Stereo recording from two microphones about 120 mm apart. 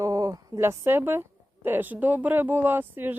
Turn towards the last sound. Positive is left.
turn(degrees=-15)  # may be behind; listen again after turning